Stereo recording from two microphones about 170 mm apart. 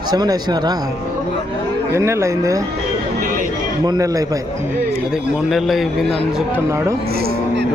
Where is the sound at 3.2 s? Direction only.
50° right (ahead or behind).